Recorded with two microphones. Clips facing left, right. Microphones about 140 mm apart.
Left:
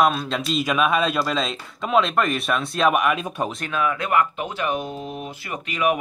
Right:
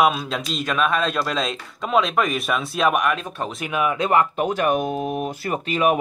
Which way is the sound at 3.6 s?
15° right (ahead or behind).